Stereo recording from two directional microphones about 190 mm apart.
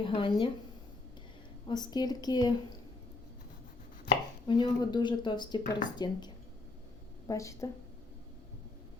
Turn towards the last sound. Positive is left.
turn(degrees=15)  # may be behind; listen again after turning